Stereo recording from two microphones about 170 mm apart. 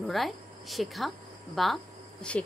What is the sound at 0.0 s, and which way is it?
Speech, centre (ahead or behind).